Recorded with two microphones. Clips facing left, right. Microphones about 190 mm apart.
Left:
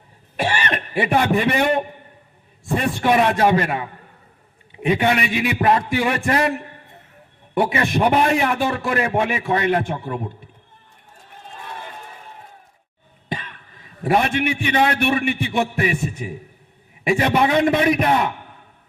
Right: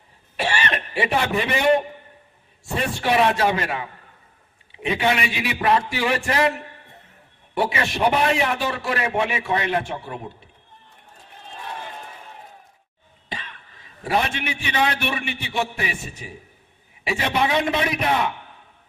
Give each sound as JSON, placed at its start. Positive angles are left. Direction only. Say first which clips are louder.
{"t": 0.3, "sound": "a sound", "louder": "left 2 dB", "side_deg": 50}
{"t": 2.7, "sound": "a man's voice", "louder": "left 3 dB", "side_deg": 50}
{"t": 13.2, "sound": "cough", "louder": "left 6 dB", "side_deg": 50}
{"t": 14.0, "sound": "a man's voice", "louder": "left 5 dB", "side_deg": 55}